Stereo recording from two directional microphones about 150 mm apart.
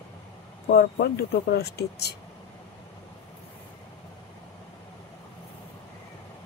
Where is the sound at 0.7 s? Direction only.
90° left.